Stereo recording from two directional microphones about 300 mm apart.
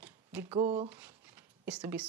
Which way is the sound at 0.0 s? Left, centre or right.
Centre.